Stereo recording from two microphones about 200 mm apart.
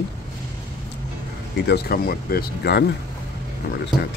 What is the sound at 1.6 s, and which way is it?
Speech, 55° left (ahead or behind).